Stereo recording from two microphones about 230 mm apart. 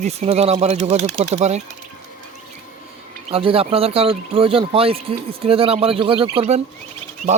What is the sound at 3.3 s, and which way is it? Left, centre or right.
Speech, right.